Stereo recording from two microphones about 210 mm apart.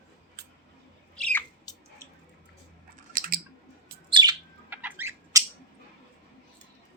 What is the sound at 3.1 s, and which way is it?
Chewing, 45° right (ahead or behind).